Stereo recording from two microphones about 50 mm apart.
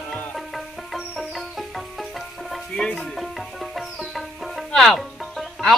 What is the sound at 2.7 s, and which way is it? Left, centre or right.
Music, centre.